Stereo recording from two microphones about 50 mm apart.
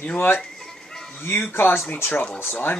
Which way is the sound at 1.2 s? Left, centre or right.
Left.